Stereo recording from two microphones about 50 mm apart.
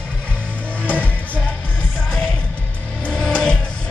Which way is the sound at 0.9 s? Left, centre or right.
Left.